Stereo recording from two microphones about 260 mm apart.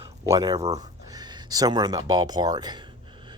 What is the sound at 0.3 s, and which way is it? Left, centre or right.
Speech, centre.